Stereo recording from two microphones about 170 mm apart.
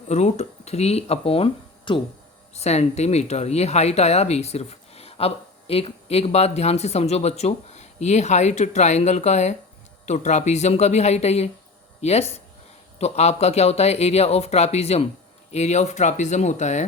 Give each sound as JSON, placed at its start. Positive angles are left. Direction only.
{"t": 0.1, "sound": "speech", "side_deg": 40}